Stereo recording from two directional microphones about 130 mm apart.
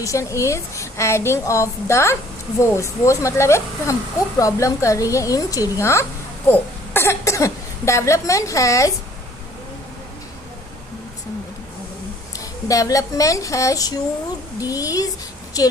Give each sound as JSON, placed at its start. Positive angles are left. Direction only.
{"t": 0.0, "sound": "a woman's voice", "side_deg": 25}
{"t": 12.4, "sound": "a woman's voice", "side_deg": 25}